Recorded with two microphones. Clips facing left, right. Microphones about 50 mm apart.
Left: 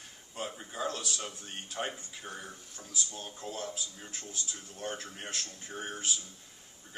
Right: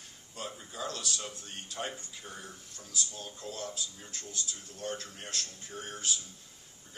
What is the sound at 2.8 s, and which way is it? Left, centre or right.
A man's voice, left.